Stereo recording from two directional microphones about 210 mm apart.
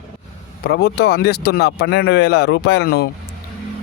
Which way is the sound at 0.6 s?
50° left (ahead or behind).